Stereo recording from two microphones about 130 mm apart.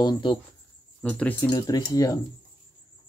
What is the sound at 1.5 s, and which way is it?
Speech, 30° left (ahead or behind).